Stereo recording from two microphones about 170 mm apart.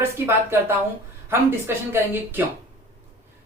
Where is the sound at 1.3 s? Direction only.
15° right (ahead or behind).